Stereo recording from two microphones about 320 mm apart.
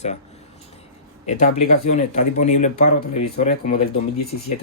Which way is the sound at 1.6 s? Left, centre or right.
Left.